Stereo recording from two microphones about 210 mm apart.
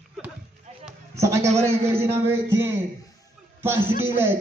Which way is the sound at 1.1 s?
15° right (ahead or behind).